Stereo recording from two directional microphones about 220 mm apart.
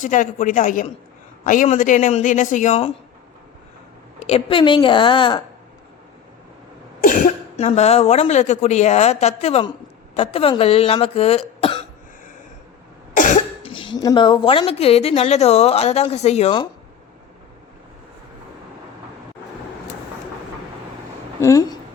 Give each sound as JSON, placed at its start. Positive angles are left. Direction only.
{"t": 0.0, "sound": "speech", "side_deg": 35}
{"t": 4.2, "sound": "speech", "side_deg": 25}
{"t": 7.0, "sound": "speech", "side_deg": 40}
{"t": 13.1, "sound": "cough", "side_deg": 35}
{"t": 14.0, "sound": "speech", "side_deg": 20}
{"t": 21.4, "sound": "a woman's voice", "side_deg": 15}